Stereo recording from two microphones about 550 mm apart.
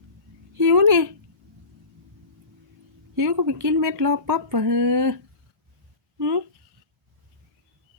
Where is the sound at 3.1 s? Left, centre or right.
Right.